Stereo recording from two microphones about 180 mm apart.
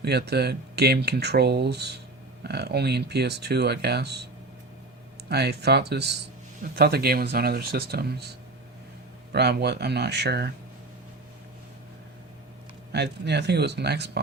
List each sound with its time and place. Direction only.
0.0 s speech: 65° right (ahead or behind)
5.3 s speech: 65° right (ahead or behind)
12.9 s speech: 70° right (ahead or behind)